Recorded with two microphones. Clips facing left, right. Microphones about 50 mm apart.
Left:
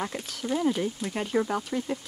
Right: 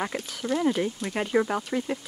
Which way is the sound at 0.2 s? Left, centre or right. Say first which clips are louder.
Even; centre.